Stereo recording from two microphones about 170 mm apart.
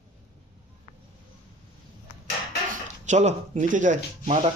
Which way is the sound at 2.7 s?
45° right (ahead or behind).